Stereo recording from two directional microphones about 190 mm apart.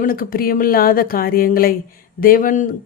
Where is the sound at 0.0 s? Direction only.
50° left (ahead or behind).